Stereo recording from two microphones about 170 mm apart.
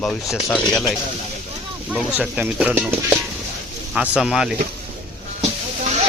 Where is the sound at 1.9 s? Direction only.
5° right (ahead or behind).